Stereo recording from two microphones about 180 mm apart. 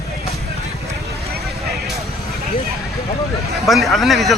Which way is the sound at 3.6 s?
Centre (ahead or behind).